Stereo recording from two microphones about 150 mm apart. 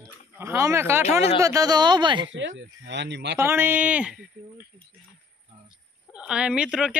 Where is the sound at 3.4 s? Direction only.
15° right (ahead or behind).